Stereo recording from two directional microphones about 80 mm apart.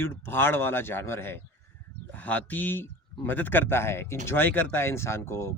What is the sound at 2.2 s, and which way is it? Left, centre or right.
A man's voice, centre.